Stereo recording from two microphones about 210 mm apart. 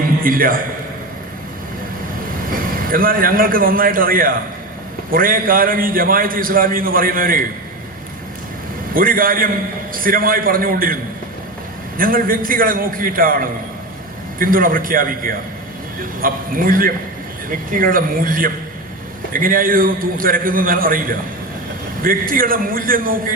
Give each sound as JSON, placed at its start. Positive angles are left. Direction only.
{"t": 0.2, "sound": "a man's voice", "side_deg": -40}
{"t": 2.5, "sound": "a man's voice", "side_deg": -45}
{"t": 9.0, "sound": "a man's voice", "side_deg": -40}
{"t": 11.9, "sound": "a man's voice", "side_deg": -45}